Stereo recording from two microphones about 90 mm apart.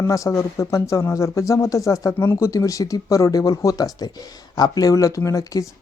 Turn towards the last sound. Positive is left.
turn(degrees=40)  # may be behind; listen again after turning